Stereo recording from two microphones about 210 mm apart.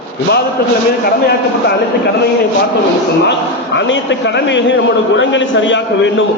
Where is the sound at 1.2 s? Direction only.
50° left (ahead or behind).